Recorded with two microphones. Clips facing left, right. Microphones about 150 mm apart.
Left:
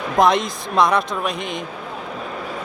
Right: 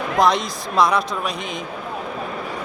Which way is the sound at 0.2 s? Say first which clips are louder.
Left 2 dB; centre (ahead or behind).